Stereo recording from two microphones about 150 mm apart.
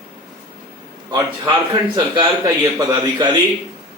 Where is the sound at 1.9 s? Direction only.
25° right (ahead or behind).